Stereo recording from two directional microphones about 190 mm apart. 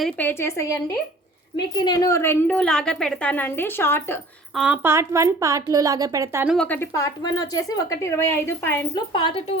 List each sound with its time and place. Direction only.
0.0 s a woman's voice: 10° left (ahead or behind)
4.5 s a woman's voice: 5° right (ahead or behind)
6.5 s a woman's voice: 5° left (ahead or behind)
9.1 s speech: 25° left (ahead or behind)